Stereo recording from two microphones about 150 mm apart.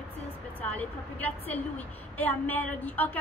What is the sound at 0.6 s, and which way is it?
A woman's voice, 10° left (ahead or behind).